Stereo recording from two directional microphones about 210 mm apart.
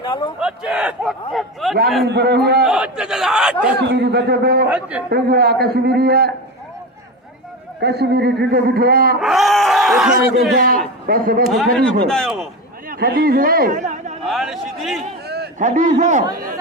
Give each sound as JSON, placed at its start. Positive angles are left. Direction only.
{"t": 0.0, "sound": "a man's voice", "side_deg": 25}
{"t": 0.3, "sound": "speech", "side_deg": -5}
{"t": 2.0, "sound": "a man's voice", "side_deg": -50}
{"t": 2.6, "sound": "speech", "side_deg": -5}
{"t": 3.8, "sound": "a man's voice", "side_deg": -55}
{"t": 4.7, "sound": "a man's voice", "side_deg": -5}
{"t": 5.1, "sound": "a man's voice", "side_deg": -50}
{"t": 7.8, "sound": "a man's voice", "side_deg": -50}
{"t": 9.2, "sound": "speech", "side_deg": 0}
{"t": 11.0, "sound": "a man's voice", "side_deg": -45}
{"t": 11.5, "sound": "speech", "side_deg": 0}
{"t": 12.9, "sound": "a man's voice", "side_deg": -45}
{"t": 14.3, "sound": "speech", "side_deg": 0}
{"t": 15.5, "sound": "a man's voice", "side_deg": -35}